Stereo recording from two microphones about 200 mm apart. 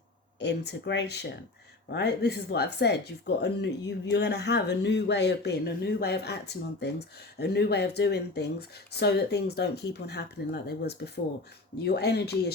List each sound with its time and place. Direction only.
0.3 s speech: 55° left (ahead or behind)